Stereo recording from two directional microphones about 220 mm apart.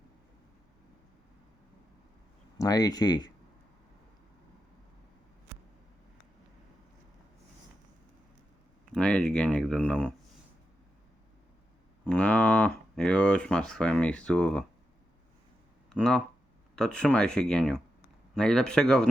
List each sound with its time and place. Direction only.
2.6 s speech: 15° left (ahead or behind)
8.9 s a sound: 5° left (ahead or behind)
12.0 s speech: 5° left (ahead or behind)
15.9 s speech: 5° left (ahead or behind)